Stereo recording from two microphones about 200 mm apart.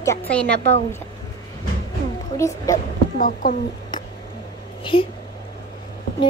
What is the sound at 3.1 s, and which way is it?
Speech, 40° left (ahead or behind).